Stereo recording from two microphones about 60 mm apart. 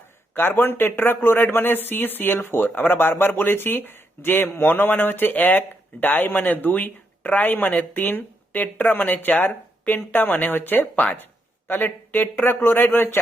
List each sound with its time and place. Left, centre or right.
0.3 s speech: left